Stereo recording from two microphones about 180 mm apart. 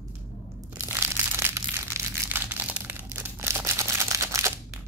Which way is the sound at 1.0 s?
15° right (ahead or behind).